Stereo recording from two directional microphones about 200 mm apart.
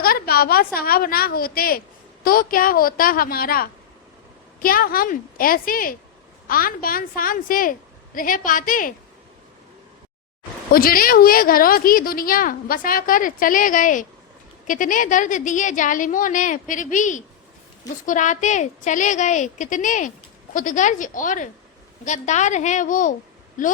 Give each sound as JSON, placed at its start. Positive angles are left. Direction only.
{"t": 0.0, "sound": "a woman's voice", "side_deg": 50}
{"t": 10.7, "sound": "a woman's voice", "side_deg": 45}